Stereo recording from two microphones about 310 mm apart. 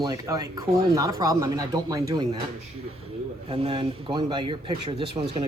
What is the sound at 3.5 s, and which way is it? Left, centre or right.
Speech, centre.